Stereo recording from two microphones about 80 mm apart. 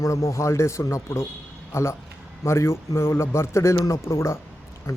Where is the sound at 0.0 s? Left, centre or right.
Left.